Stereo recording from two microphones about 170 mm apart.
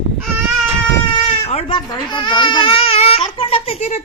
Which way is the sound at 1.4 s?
35° left (ahead or behind).